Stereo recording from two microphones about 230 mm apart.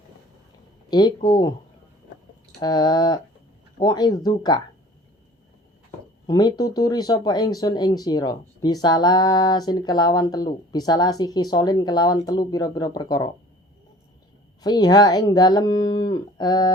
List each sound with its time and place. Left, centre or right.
0.9 s speech: centre
2.6 s speech: centre
6.2 s speech: centre
14.6 s speech: centre